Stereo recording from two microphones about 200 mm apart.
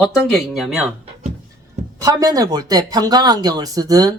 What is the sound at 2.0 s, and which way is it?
Speech, 20° right (ahead or behind).